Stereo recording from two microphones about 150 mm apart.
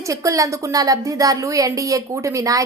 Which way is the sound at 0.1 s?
20° right (ahead or behind).